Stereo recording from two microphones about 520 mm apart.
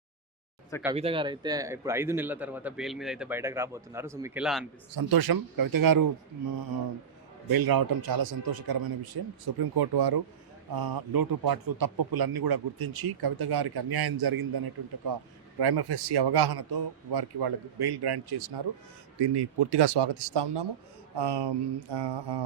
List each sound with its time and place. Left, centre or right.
0.7 s speech: centre
4.9 s speech: right
7.5 s a man's voice: right